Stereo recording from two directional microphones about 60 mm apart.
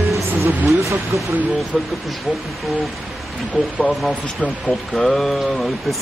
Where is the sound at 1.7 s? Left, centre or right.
Centre.